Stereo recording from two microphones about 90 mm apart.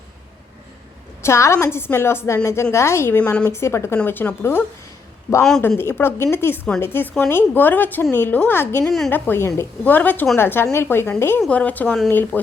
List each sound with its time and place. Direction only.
1.2 s a woman's voice: 30° left (ahead or behind)
5.6 s a woman's voice: 25° left (ahead or behind)
8.8 s a woman's voice: 5° left (ahead or behind)
9.0 s a woman's voice: 20° left (ahead or behind)
11.3 s a woman's voice: 15° left (ahead or behind)